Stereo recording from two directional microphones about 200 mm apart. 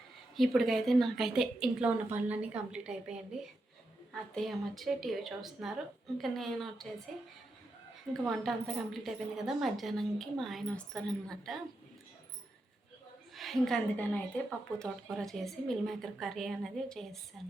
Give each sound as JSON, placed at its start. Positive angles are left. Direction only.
{"t": 0.3, "sound": "a woman's voice", "side_deg": 0}
{"t": 4.4, "sound": "a woman's voice", "side_deg": 0}
{"t": 8.1, "sound": "a woman's voice", "side_deg": 0}
{"t": 13.3, "sound": "a woman's voice", "side_deg": 0}